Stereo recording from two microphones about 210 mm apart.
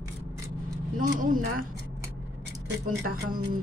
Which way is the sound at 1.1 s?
40° right (ahead or behind).